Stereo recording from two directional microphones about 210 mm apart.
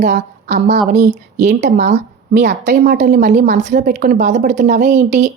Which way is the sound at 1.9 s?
55° right (ahead or behind).